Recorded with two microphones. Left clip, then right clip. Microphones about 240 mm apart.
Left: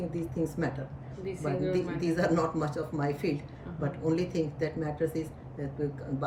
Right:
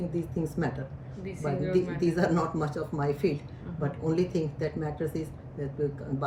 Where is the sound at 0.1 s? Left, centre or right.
Centre.